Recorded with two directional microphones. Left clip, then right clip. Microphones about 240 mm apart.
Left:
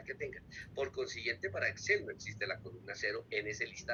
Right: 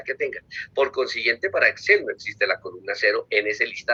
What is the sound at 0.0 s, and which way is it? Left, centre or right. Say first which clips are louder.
A man's voice: right 16 dB; right.